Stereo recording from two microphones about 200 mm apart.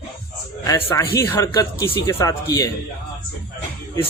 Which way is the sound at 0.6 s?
15° left (ahead or behind).